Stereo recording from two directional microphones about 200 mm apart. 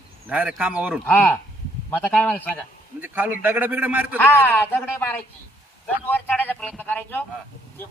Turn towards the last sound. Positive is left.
turn(degrees=10)  # may be behind; listen again after turning